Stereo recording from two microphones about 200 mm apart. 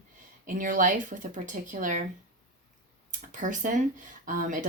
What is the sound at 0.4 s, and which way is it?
Speech, 40° right (ahead or behind).